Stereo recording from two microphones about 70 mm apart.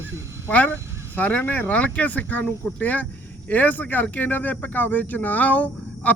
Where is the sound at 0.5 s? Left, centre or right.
Left.